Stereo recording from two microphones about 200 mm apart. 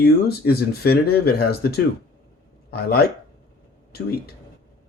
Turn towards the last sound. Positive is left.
turn(degrees=50)  # may be behind; listen again after turning